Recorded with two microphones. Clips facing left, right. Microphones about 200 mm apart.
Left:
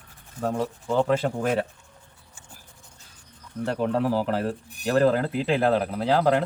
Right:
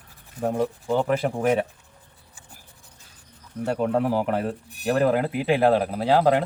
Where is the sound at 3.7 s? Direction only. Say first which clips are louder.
Right 1 dB; 15° right (ahead or behind).